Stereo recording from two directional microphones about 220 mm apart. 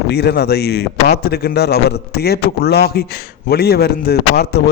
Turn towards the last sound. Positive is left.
turn(degrees=45)  # may be behind; listen again after turning